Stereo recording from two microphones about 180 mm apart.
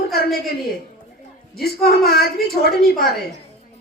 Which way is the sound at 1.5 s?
60° left (ahead or behind).